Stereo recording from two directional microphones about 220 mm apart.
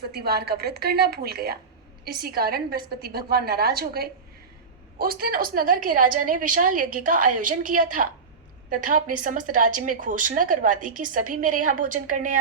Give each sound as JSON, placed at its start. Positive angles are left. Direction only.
{"t": 0.1, "sound": "a woman's voice", "side_deg": -45}